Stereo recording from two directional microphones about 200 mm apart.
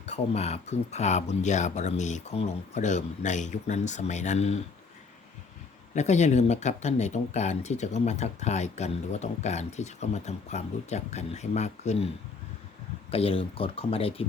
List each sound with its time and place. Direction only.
0.0 s speech: 30° left (ahead or behind)
5.9 s speech: 35° left (ahead or behind)
13.1 s speech: 30° left (ahead or behind)